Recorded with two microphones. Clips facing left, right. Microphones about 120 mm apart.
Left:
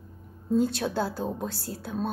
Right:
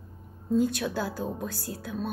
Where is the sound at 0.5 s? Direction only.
30° left (ahead or behind).